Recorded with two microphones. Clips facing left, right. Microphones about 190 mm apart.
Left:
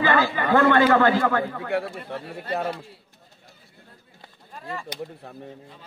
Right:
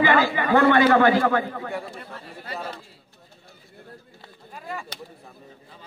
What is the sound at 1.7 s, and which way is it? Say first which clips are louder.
Speech: left 6 dB; 70° left (ahead or behind).